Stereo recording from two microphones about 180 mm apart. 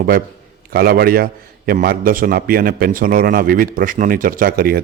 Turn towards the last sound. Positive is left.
turn(degrees=-55)  # may be behind; listen again after turning